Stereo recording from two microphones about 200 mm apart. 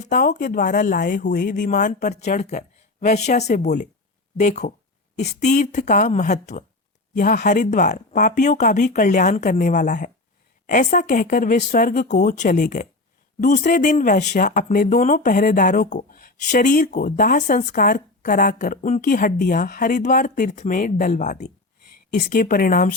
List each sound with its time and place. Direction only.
0.1 s a woman's voice: 40° left (ahead or behind)